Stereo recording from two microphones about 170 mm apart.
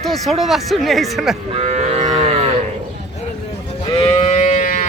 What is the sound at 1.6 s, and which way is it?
Livestock, 40° right (ahead or behind).